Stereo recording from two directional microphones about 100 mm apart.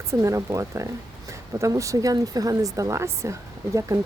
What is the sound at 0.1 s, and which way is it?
Speech, 30° right (ahead or behind).